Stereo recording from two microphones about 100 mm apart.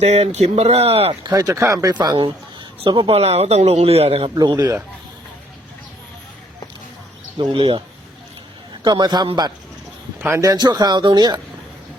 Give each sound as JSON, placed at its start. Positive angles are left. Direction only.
{"t": 0.0, "sound": "a man's voice", "side_deg": -90}
{"t": 1.3, "sound": "speech", "side_deg": -35}
{"t": 1.9, "sound": "speech", "side_deg": -45}
{"t": 2.1, "sound": "speech", "side_deg": -55}
{"t": 3.1, "sound": "a man's voice", "side_deg": -85}
{"t": 4.4, "sound": "speech", "side_deg": -45}
{"t": 7.3, "sound": "speech", "side_deg": -55}
{"t": 8.8, "sound": "speech", "side_deg": -45}
{"t": 10.2, "sound": "speech", "side_deg": -25}